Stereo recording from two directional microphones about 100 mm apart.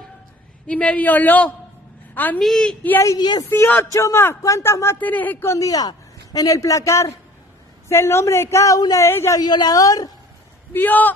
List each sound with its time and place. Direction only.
0.7 s a man's voice: 10° left (ahead or behind)
2.4 s a man's voice: 5° left (ahead or behind)
3.2 s a woman's voice: 45° left (ahead or behind)
3.4 s speech: 25° left (ahead or behind)
4.9 s a man's voice: 15° left (ahead or behind)
9.4 s a man's voice: 45° left (ahead or behind)
10.7 s a man's voice: 20° left (ahead or behind)